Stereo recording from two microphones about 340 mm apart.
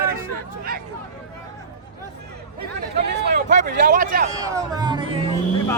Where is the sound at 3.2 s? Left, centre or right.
Right.